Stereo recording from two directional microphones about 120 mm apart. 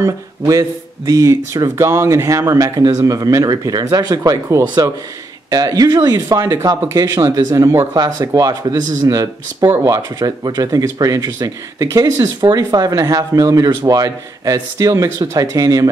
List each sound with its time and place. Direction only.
0.0 s speech: 25° right (ahead or behind)